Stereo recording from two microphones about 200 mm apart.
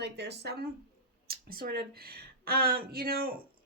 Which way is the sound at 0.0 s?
55° right (ahead or behind).